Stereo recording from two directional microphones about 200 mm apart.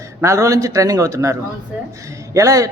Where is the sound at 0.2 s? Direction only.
15° right (ahead or behind).